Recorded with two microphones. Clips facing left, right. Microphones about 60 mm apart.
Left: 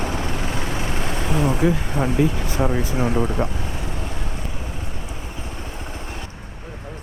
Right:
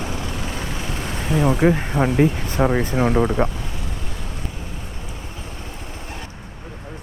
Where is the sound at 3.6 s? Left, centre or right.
Left.